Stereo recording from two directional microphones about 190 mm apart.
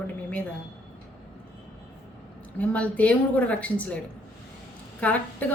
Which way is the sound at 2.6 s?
5° left (ahead or behind).